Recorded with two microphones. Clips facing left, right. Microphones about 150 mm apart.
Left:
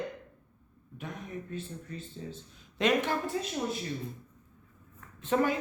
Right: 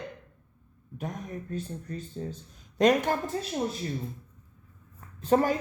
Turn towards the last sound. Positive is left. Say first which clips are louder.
# right 4 dB
turn(degrees=-40)  # may be behind; listen again after turning